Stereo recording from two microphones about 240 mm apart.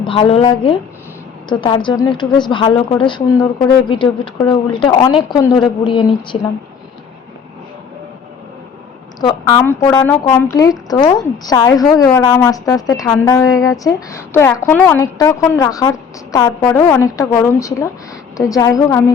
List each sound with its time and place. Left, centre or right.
0.0 s a woman's voice: left
9.6 s speech: centre